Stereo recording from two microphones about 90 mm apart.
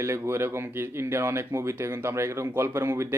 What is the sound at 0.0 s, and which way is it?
Speech, 30° right (ahead or behind).